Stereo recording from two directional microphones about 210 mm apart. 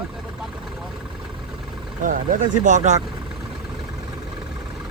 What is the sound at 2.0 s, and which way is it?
A man's voice, 40° right (ahead or behind).